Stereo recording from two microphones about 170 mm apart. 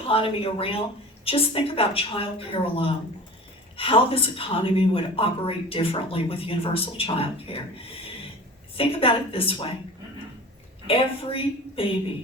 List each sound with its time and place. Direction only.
0.1 s a woman's voice: 35° left (ahead or behind)
10.8 s a woman's voice: 35° left (ahead or behind)